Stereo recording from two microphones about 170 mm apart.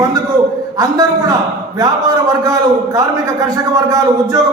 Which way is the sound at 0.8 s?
20° right (ahead or behind).